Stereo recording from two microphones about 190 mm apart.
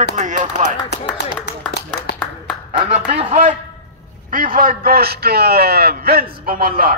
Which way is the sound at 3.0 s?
30° right (ahead or behind).